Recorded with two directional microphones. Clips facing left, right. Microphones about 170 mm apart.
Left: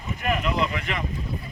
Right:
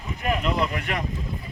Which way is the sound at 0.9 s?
50° right (ahead or behind).